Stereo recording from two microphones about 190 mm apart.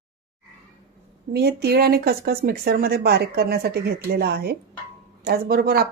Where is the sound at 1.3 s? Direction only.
55° right (ahead or behind).